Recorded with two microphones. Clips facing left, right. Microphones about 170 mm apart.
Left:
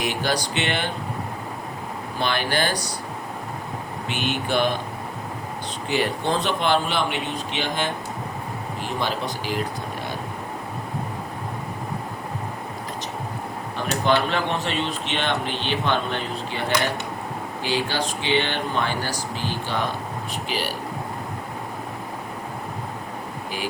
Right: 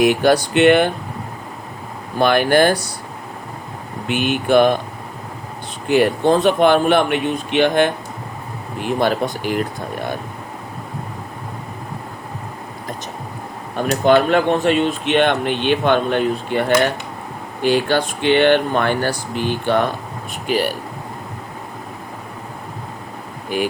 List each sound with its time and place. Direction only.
0.0 s speech: 55° right (ahead or behind)
2.1 s speech: 50° right (ahead or behind)
4.1 s speech: 55° right (ahead or behind)
5.9 s speech: 55° right (ahead or behind)
13.7 s speech: 50° right (ahead or behind)